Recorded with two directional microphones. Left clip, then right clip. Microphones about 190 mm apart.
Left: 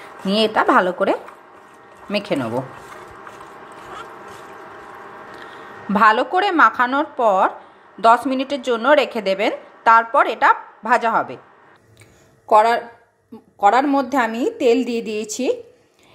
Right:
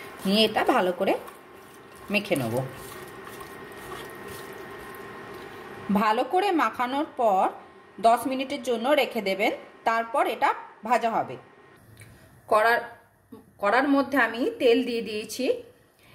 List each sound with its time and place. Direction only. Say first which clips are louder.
0.3 s a woman's voice: left 6 dB; 10° left (ahead or behind)
5.9 s a woman's voice: left 9 dB; 10° left (ahead or behind)
12.4 s a woman's voice: left 7 dB; 20° left (ahead or behind)